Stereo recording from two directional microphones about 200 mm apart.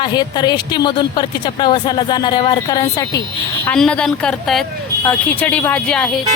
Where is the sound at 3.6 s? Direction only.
5° left (ahead or behind).